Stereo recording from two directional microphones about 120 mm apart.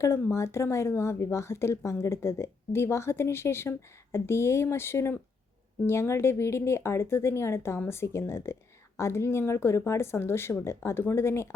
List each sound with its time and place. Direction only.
0.0 s speech: 25° left (ahead or behind)